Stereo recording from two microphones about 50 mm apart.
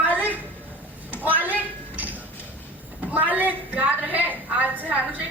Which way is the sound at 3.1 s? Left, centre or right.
Right.